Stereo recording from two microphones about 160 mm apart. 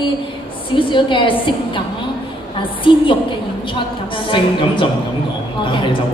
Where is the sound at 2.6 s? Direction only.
30° left (ahead or behind).